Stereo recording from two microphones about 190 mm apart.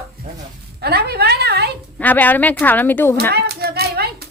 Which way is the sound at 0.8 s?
55° right (ahead or behind).